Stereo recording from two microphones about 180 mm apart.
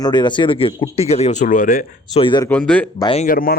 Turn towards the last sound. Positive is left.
turn(degrees=55)  # may be behind; listen again after turning